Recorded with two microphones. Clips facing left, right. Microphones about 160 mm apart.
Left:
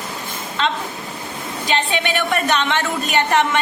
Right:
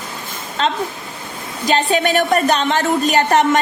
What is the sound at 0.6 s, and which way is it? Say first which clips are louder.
A woman's voice: right 3 dB; 40° right (ahead or behind).